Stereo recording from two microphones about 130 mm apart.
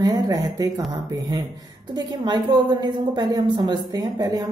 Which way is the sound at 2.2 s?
35° right (ahead or behind).